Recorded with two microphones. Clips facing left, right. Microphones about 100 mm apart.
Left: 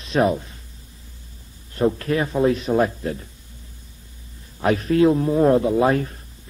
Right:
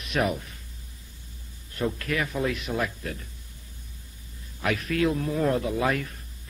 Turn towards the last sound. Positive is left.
turn(degrees=30)  # may be behind; listen again after turning